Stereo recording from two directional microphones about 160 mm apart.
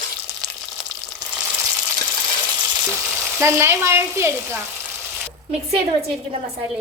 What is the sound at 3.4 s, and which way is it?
A woman's voice, 15° right (ahead or behind).